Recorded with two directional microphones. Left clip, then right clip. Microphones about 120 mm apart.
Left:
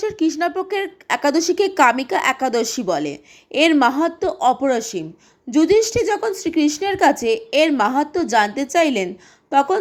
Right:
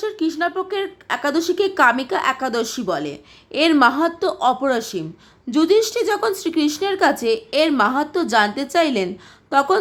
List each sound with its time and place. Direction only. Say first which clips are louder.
0.0 s a woman's voice: left 2 dB; 25° left (ahead or behind)